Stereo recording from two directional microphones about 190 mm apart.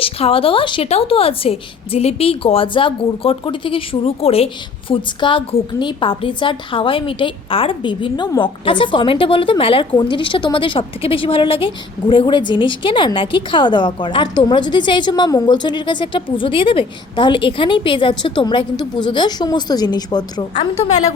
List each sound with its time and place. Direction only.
0.0 s a woman's voice: 30° left (ahead or behind)